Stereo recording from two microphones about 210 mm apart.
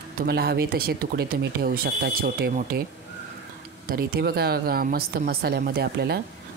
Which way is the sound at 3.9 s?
45° right (ahead or behind).